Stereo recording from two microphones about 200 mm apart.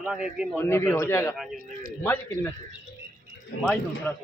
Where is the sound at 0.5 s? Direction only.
10° left (ahead or behind).